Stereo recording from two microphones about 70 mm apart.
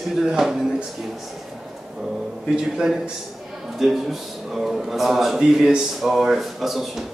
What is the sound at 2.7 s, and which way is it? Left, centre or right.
A man's voice, centre.